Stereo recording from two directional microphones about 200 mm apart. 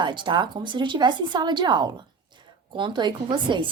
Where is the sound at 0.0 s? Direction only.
25° right (ahead or behind).